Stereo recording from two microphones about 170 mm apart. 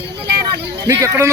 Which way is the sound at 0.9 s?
15° right (ahead or behind).